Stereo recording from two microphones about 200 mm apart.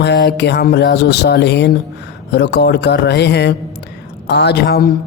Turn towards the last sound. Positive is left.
turn(degrees=50)  # may be behind; listen again after turning